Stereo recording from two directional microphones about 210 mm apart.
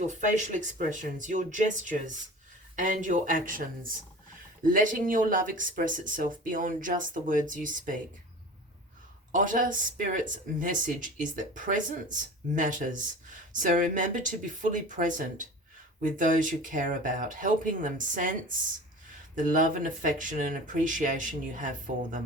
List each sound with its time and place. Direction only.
0.1 s speech: 35° right (ahead or behind)
9.3 s speech: 40° right (ahead or behind)